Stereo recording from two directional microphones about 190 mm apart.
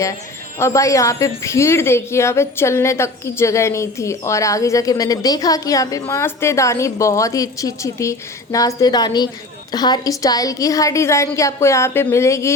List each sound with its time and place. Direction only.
0.6 s a woman's voice: 15° left (ahead or behind)